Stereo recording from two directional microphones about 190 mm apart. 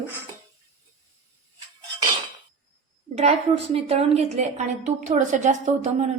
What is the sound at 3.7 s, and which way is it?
A woman's voice, 30° right (ahead or behind).